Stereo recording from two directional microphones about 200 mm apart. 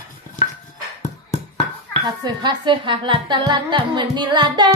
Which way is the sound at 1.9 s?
25° right (ahead or behind).